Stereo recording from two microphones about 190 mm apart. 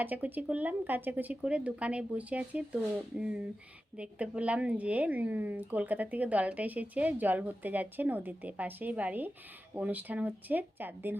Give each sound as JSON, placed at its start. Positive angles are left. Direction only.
{"t": 0.0, "sound": "a woman's voice", "side_deg": -10}